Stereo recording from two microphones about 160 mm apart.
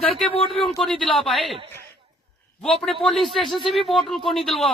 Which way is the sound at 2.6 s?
5° left (ahead or behind).